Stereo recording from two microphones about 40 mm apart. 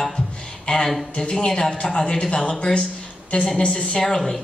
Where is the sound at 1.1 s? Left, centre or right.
Left.